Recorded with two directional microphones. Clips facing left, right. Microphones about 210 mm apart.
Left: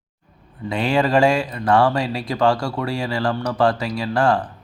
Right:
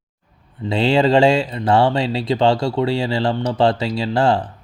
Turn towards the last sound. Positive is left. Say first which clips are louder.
# right 2 dB
turn(degrees=-25)  # may be behind; listen again after turning